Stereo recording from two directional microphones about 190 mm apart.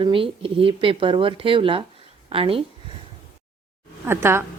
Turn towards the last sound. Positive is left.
turn(degrees=-10)  # may be behind; listen again after turning